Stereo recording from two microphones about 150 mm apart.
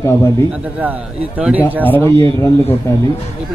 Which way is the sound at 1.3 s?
10° right (ahead or behind).